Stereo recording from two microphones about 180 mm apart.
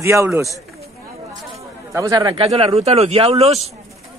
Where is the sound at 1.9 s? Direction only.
20° right (ahead or behind); by 3.7 s 35° right (ahead or behind).